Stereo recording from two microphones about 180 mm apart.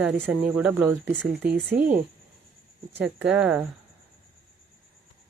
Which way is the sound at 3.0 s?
5° right (ahead or behind).